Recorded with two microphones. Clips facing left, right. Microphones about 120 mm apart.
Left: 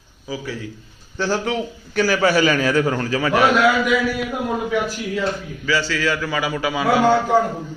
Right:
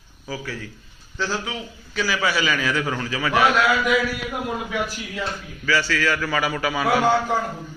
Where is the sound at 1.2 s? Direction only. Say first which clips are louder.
Left 6 dB; 60° left (ahead or behind); by 3.4 s 35° left (ahead or behind).